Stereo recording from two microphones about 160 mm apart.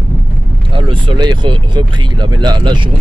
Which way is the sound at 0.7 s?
30° right (ahead or behind).